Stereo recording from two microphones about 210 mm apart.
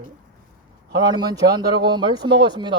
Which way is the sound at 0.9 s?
20° right (ahead or behind).